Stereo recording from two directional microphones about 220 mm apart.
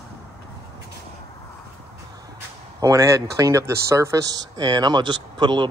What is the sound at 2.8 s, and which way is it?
Speech, 15° right (ahead or behind).